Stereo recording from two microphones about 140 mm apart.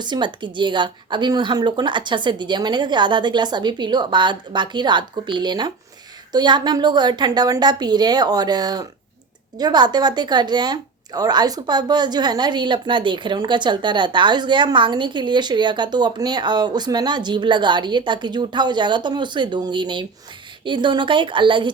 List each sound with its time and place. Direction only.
0.0 s a woman's voice: 35° right (ahead or behind)